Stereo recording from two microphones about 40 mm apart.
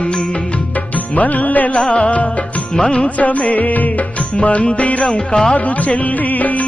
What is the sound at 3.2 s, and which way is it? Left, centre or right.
Music, left.